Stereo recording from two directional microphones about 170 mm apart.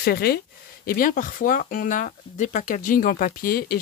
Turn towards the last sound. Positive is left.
turn(degrees=60)  # may be behind; listen again after turning